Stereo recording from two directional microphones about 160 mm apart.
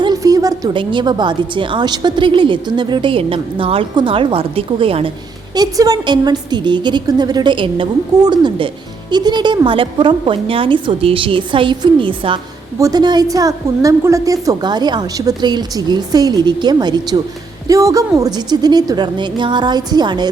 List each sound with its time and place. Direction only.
0.0 s a woman's voice: 25° right (ahead or behind)
5.5 s a woman's voice: 25° right (ahead or behind)